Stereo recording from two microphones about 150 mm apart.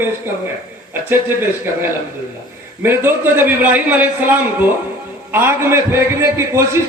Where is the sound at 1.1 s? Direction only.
15° right (ahead or behind).